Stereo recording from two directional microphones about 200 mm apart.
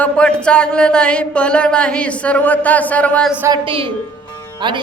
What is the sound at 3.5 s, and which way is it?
Speech, 25° right (ahead or behind).